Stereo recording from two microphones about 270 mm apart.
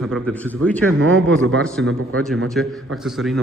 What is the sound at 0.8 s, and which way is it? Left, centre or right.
Speech, right.